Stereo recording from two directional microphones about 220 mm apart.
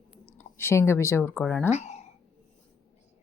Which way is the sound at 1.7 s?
30° left (ahead or behind).